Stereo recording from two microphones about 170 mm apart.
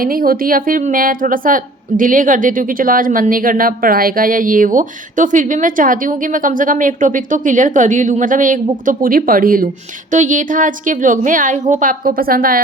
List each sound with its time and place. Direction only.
0.0 s a woman's voice: 55° right (ahead or behind)